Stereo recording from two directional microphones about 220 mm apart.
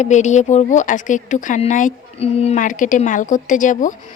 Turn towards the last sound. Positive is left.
turn(degrees=35)  # may be behind; listen again after turning